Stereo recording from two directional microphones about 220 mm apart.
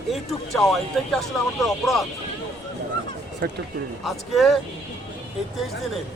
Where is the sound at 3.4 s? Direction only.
50° right (ahead or behind).